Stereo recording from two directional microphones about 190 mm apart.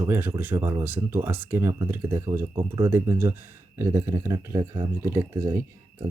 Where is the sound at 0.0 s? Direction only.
10° right (ahead or behind).